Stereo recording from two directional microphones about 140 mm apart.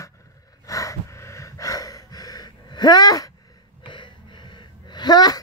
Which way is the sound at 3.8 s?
35° left (ahead or behind).